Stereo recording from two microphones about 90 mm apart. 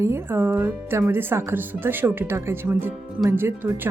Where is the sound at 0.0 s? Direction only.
25° right (ahead or behind).